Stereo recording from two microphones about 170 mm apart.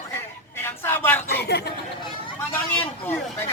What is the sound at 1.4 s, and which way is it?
Chatter, 75° left (ahead or behind).